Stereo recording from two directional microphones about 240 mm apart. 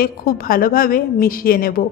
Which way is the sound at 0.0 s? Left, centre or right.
Left.